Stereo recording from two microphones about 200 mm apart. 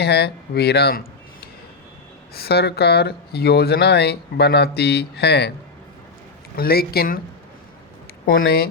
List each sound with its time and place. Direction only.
0.0 s speech: 55° left (ahead or behind)
6.6 s speech: 50° left (ahead or behind)
8.3 s speech: 50° left (ahead or behind)